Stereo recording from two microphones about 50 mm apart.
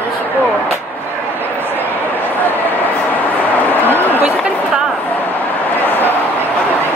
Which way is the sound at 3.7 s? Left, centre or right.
Left.